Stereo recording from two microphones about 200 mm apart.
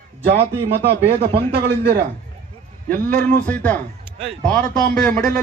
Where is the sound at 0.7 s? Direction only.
55° right (ahead or behind).